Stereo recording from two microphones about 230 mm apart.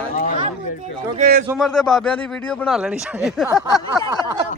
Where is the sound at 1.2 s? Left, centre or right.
Right.